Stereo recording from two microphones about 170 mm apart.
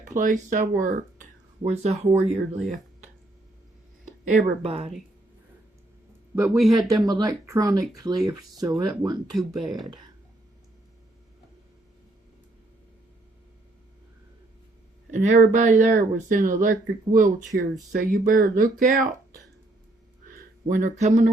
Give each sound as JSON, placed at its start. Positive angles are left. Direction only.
{"t": 0.1, "sound": "speech", "side_deg": -50}
{"t": 4.0, "sound": "a sound", "side_deg": -50}
{"t": 4.6, "sound": "speech", "side_deg": -35}
{"t": 6.3, "sound": "a man's voice", "side_deg": -15}
{"t": 6.6, "sound": "speech", "side_deg": 0}
{"t": 6.8, "sound": "speech", "side_deg": -20}
{"t": 8.6, "sound": "speech", "side_deg": -5}
{"t": 15.1, "sound": "speech", "side_deg": -45}
{"t": 17.5, "sound": "speech", "side_deg": -85}
{"t": 18.0, "sound": "speech", "side_deg": -55}
{"t": 20.3, "sound": "speech", "side_deg": -50}